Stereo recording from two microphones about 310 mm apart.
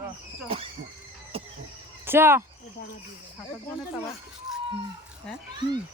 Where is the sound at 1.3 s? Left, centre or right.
Centre.